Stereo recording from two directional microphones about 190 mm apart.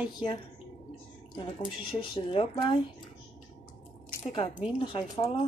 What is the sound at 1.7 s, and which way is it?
A woman's voice, 30° left (ahead or behind).